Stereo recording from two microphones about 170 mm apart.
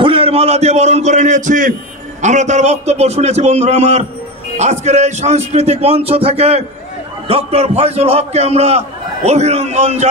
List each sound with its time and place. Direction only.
0.0 s a man's voice: 35° right (ahead or behind)